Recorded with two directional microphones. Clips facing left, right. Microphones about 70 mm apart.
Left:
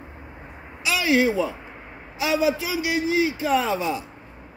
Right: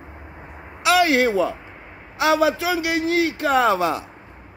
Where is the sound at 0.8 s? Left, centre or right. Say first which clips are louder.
Right 4 dB; right.